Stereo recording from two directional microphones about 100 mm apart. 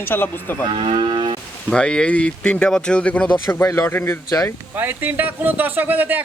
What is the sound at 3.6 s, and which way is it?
Speech, 30° left (ahead or behind).